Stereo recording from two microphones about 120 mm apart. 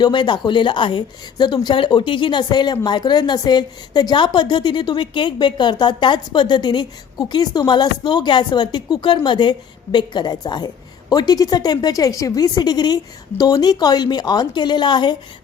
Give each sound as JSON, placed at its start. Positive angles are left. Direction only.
{"t": 0.0, "sound": "speech", "side_deg": 40}